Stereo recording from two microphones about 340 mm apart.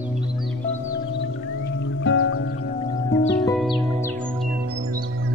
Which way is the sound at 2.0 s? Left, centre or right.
Left.